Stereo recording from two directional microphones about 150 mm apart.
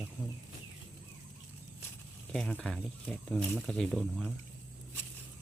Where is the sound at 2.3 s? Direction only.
5° left (ahead or behind).